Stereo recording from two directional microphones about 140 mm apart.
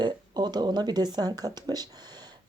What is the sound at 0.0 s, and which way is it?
Speech, 30° right (ahead or behind).